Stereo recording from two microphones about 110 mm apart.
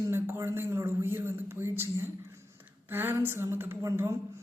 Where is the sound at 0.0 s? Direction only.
25° right (ahead or behind).